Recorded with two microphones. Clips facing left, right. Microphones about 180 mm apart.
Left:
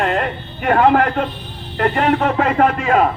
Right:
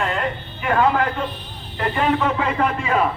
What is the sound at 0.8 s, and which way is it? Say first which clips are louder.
A man's voice: left 5 dB; 65° left (ahead or behind).